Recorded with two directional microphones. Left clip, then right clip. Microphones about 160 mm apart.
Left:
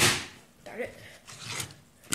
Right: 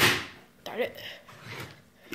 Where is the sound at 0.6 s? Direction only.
20° right (ahead or behind).